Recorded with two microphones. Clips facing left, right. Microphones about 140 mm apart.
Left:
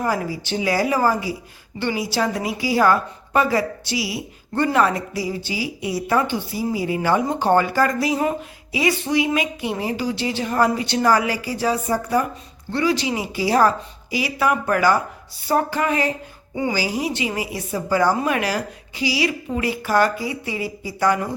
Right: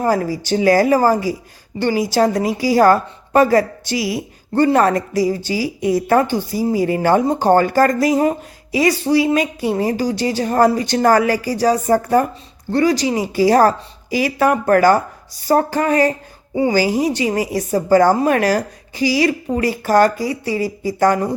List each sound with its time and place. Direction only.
0.0 s a woman's voice: 40° right (ahead or behind)